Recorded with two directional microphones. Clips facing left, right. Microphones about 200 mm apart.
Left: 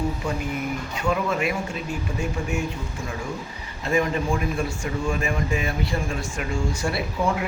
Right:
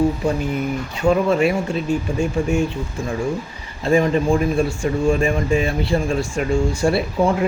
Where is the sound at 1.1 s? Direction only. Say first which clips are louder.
Right 8 dB; 30° right (ahead or behind).